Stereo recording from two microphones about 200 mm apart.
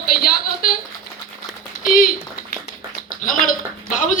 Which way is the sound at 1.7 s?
45° left (ahead or behind).